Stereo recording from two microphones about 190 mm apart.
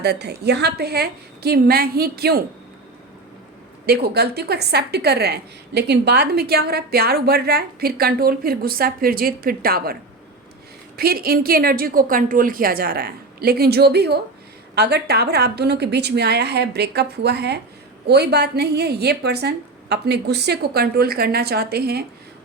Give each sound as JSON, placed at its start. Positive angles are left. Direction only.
{"t": 0.0, "sound": "a woman's voice", "side_deg": -60}
{"t": 3.8, "sound": "a woman's voice", "side_deg": -55}